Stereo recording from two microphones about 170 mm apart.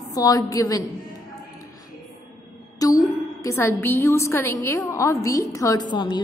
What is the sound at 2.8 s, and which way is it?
A woman's voice, 20° left (ahead or behind).